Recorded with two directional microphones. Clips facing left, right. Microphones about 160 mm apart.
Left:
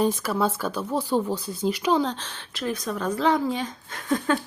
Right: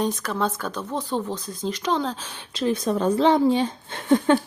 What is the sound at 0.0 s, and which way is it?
Speech, 5° left (ahead or behind).